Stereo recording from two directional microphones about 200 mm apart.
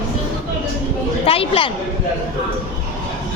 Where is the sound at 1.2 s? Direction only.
30° left (ahead or behind).